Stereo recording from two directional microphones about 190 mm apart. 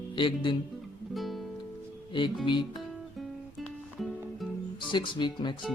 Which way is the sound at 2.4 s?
25° left (ahead or behind).